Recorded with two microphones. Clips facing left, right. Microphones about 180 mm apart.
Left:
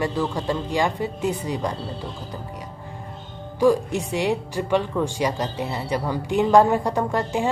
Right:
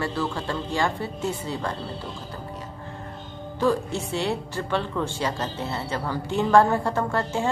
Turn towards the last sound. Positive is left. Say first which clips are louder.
# left 2 dB
turn(degrees=15)  # may be behind; listen again after turning